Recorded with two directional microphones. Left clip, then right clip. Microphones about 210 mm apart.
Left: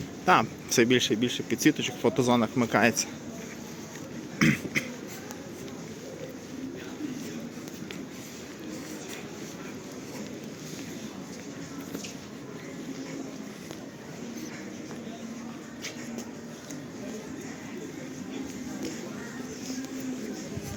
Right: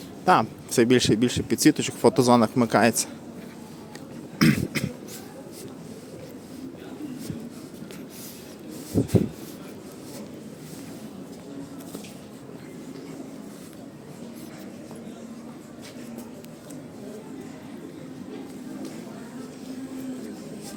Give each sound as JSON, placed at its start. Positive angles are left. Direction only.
{"t": 0.3, "sound": "speech", "side_deg": -20}
{"t": 0.9, "sound": "speech", "side_deg": -30}
{"t": 4.4, "sound": "cough", "side_deg": -25}